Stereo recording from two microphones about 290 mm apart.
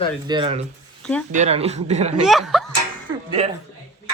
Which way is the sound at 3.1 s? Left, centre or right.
Right.